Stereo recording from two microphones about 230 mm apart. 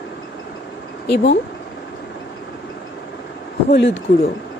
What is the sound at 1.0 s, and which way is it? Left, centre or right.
Speech, left.